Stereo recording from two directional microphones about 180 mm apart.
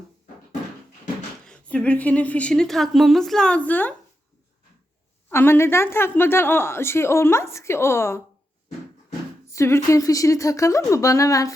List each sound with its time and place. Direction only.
1.5 s a woman's voice: 5° left (ahead or behind)
5.3 s a woman's voice: 15° left (ahead or behind)
9.5 s a woman's voice: 15° left (ahead or behind)